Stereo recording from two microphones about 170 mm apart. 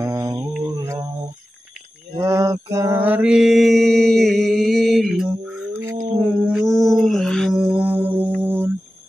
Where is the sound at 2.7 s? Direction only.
15° right (ahead or behind).